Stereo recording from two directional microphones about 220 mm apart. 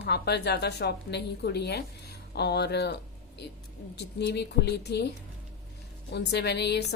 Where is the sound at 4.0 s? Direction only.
50° left (ahead or behind).